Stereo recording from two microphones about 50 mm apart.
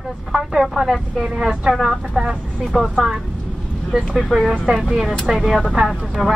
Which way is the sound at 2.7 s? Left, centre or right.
Centre.